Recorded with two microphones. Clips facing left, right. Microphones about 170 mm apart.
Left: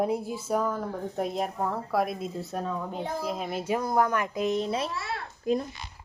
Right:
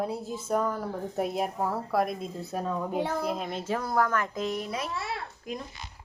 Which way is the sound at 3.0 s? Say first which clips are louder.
Right 3 dB; 75° right (ahead or behind).